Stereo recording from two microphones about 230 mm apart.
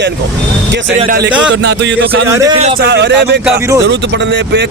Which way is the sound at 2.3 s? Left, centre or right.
Centre.